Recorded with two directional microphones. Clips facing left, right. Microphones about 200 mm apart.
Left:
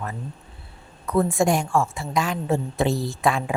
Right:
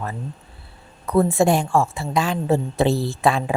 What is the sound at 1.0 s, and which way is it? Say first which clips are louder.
A woman's voice: right 3 dB; 35° right (ahead or behind).